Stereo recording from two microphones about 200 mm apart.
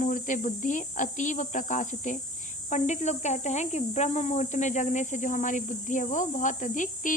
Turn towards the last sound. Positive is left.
turn(degrees=40)  # may be behind; listen again after turning